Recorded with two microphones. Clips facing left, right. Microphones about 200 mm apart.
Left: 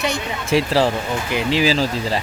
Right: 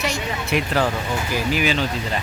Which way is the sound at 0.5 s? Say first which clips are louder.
Left 5 dB; 30° left (ahead or behind).